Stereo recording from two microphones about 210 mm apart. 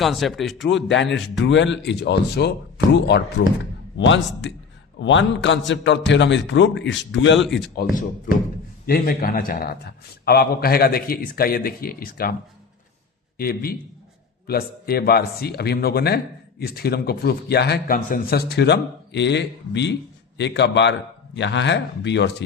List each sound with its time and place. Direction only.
0.0 s speech: centre (ahead or behind)
0.6 s speech: 60° left (ahead or behind)
8.9 s a man's voice: 45° left (ahead or behind)